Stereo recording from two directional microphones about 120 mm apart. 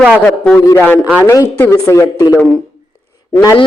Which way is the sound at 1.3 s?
25° left (ahead or behind).